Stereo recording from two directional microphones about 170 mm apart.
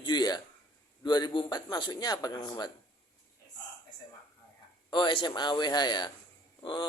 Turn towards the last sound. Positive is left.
turn(degrees=30)  # may be behind; listen again after turning